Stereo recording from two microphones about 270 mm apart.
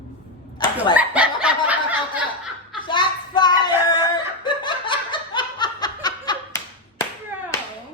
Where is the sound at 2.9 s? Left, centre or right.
Centre.